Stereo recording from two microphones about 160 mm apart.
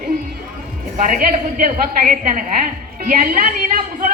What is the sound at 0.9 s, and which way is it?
A woman's voice, 55° right (ahead or behind).